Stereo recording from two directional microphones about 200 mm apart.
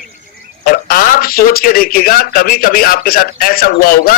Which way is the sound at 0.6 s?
45° left (ahead or behind).